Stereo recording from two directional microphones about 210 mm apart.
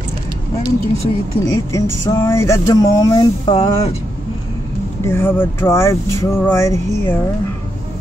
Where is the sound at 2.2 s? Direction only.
15° left (ahead or behind).